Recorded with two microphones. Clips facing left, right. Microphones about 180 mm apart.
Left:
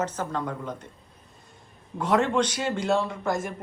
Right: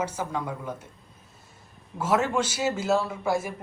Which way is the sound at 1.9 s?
5° right (ahead or behind).